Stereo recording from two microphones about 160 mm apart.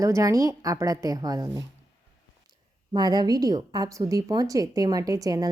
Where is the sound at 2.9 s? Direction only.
25° right (ahead or behind).